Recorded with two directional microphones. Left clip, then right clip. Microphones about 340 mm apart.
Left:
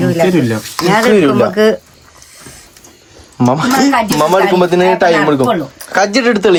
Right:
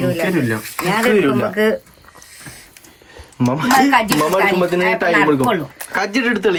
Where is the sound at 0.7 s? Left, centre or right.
Left.